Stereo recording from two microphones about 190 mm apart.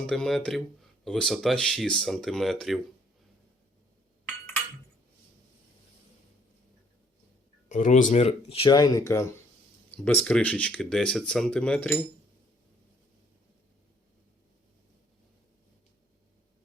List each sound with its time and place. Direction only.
0.0 s speech: 5° left (ahead or behind)
7.7 s speech: 40° left (ahead or behind); by 11.9 s 5° left (ahead or behind)